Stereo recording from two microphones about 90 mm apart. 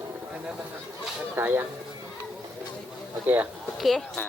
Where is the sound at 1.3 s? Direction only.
25° right (ahead or behind).